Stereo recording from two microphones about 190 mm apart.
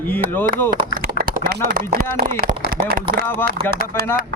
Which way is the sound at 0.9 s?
50° right (ahead or behind).